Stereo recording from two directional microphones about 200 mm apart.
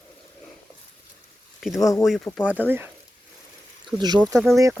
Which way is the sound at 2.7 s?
10° right (ahead or behind).